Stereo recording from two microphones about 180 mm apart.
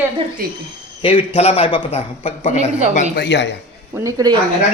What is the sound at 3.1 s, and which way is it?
Speech, 75° left (ahead or behind).